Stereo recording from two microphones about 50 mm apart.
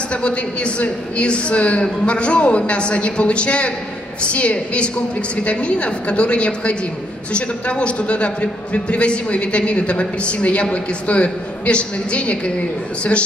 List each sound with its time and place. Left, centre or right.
0.1 s a man's voice: left